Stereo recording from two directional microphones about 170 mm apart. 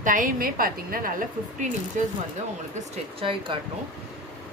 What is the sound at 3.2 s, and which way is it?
Speech, 30° right (ahead or behind).